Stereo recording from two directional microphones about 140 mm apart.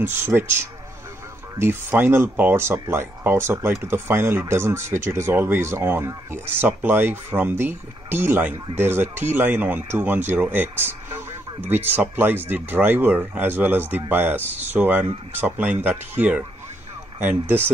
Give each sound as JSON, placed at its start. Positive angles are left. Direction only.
{"t": 0.0, "sound": "speech", "side_deg": -15}